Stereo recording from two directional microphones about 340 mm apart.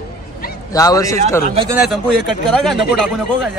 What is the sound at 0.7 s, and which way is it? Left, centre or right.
Speech, centre.